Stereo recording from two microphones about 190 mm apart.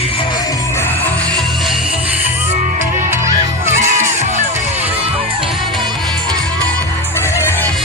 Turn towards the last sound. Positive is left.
turn(degrees=15)  # may be behind; listen again after turning